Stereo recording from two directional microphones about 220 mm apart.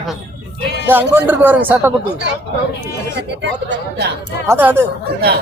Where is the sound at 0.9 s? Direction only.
10° right (ahead or behind).